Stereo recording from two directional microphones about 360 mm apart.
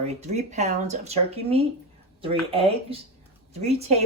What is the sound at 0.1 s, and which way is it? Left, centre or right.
Speech, centre.